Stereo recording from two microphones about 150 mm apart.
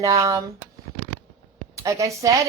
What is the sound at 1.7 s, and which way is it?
Speech, 20° right (ahead or behind).